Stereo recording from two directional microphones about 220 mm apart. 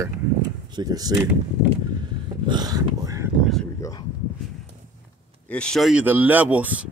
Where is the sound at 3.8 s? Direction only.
15° left (ahead or behind).